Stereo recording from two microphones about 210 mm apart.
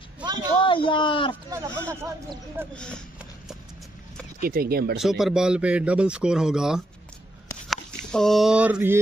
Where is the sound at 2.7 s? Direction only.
5° left (ahead or behind).